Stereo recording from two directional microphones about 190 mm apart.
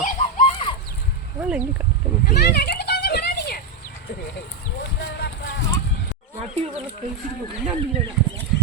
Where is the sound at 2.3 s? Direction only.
55° left (ahead or behind).